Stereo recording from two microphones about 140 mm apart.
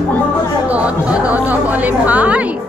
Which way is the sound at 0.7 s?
10° right (ahead or behind).